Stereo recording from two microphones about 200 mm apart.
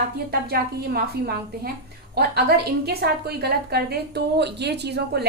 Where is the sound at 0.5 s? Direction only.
50° right (ahead or behind).